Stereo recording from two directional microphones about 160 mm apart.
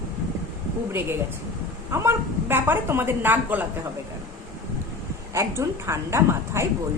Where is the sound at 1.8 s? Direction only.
15° right (ahead or behind).